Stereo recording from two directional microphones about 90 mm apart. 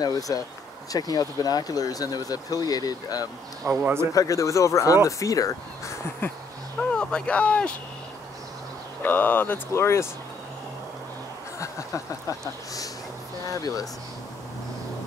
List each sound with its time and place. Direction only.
0.3 s speech: 40° left (ahead or behind)
3.6 s a man's voice: 30° right (ahead or behind)
4.1 s speech: 40° left (ahead or behind)
6.2 s speech: 25° left (ahead or behind)
6.8 s speech: 10° left (ahead or behind)
9.0 s speech: 20° left (ahead or behind)
11.6 s speech: 40° left (ahead or behind)